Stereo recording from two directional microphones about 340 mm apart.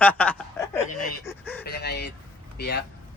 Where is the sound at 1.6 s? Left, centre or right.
Left.